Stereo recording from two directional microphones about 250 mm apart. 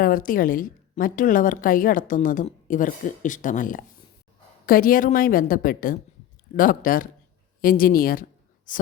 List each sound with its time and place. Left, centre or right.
0.0 s a woman's voice: left